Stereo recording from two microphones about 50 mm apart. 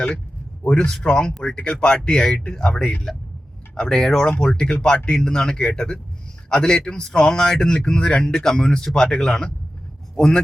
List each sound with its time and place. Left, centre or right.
0.6 s a man's voice: left